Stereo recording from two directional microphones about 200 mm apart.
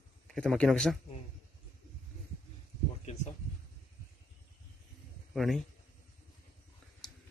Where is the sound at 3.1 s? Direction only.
35° left (ahead or behind).